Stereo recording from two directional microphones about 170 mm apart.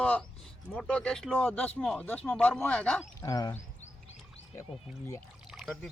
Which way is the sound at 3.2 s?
20° left (ahead or behind).